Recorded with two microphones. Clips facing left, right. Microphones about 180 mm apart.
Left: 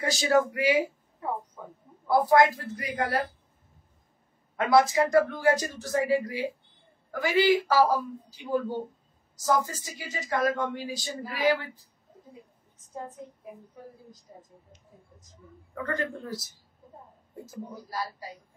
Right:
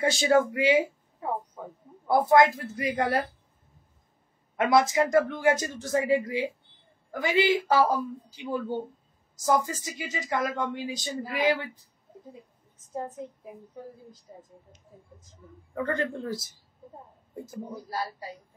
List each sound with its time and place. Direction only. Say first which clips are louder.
0.0 s speech: right 2 dB; 25° right (ahead or behind)
2.0 s speech: right 1 dB; 25° right (ahead or behind)
4.6 s speech: even; 20° right (ahead or behind)
15.7 s speech: right 3 dB; 25° right (ahead or behind)
17.8 s speech: right 1 dB; 30° right (ahead or behind)